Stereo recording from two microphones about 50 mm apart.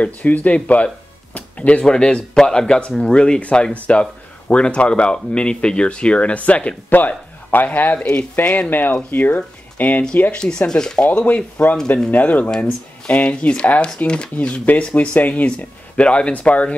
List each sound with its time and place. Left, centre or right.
0.0 s speech: left
1.3 s music: left
1.9 s speech: centre
10.6 s speech: centre
11.1 s speech: left
12.4 s speech: centre